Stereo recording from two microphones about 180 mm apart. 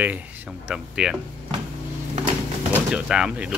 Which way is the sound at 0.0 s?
10° right (ahead or behind).